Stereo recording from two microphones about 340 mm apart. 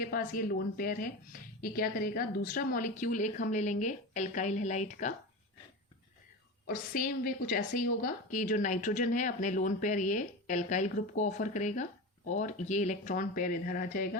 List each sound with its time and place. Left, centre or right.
0.0 s a woman's voice: left
6.7 s a woman's voice: left